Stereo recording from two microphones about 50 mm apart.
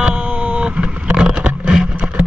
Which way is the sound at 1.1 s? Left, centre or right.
Centre.